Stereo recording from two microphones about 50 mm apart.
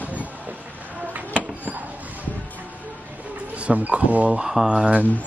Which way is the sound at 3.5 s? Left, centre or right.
Right.